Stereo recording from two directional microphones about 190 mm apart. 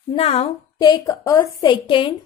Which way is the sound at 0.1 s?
30° left (ahead or behind).